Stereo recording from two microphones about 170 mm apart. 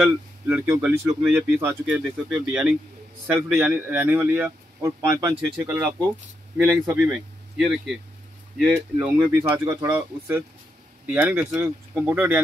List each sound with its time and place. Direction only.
0.5 s speech: 10° right (ahead or behind)
7.5 s speech: 5° right (ahead or behind)
9.1 s speech: 15° right (ahead or behind)